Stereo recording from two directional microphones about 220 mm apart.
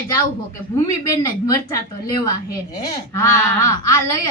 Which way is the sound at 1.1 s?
15° left (ahead or behind).